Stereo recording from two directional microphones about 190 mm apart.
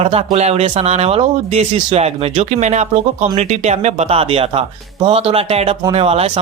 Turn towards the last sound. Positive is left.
turn(degrees=-30)  # may be behind; listen again after turning